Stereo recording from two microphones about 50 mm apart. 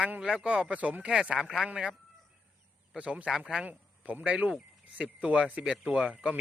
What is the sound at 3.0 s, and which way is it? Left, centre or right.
Speech, right.